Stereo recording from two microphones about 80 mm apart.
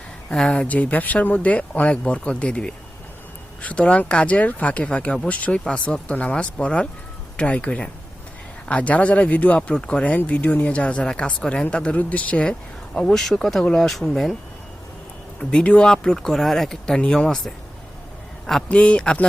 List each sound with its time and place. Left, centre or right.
0.3 s speech: centre
15.5 s speech: centre
18.7 s speech: centre